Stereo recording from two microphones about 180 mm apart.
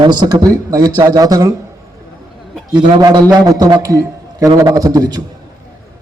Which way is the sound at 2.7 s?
25° right (ahead or behind).